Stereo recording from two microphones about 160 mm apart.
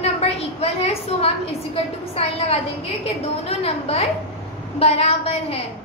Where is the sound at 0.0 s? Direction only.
40° left (ahead or behind).